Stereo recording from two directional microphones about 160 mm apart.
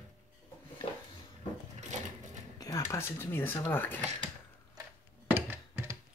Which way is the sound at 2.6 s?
20° left (ahead or behind).